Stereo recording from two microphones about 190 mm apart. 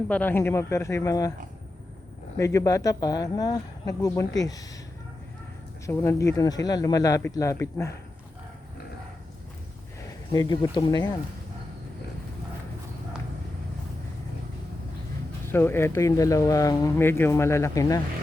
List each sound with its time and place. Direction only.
0.1 s speech: 10° left (ahead or behind)
2.4 s speech: 15° left (ahead or behind)
5.8 s speech: 15° left (ahead or behind)
10.3 s speech: 20° left (ahead or behind)
15.4 s speech: 10° left (ahead or behind)